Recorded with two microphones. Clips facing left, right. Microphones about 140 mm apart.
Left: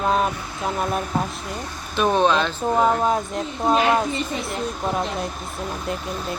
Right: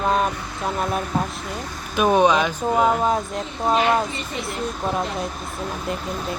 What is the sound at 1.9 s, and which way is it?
Speech, 10° right (ahead or behind).